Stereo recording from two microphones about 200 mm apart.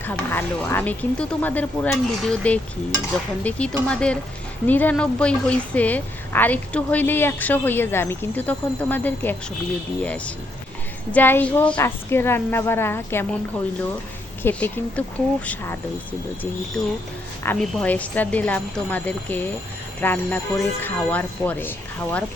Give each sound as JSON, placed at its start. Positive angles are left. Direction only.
{"t": 0.0, "sound": "a woman's voice", "side_deg": 10}
{"t": 14.4, "sound": "a woman's voice", "side_deg": 10}
{"t": 17.4, "sound": "a woman's voice", "side_deg": 5}